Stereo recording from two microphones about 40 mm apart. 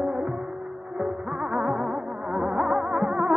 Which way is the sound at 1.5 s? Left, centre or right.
Centre.